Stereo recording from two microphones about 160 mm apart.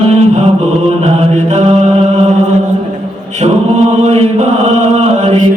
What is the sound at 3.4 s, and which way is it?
Chant, 40° right (ahead or behind).